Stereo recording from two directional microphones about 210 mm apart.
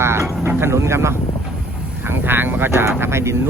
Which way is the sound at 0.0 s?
10° right (ahead or behind).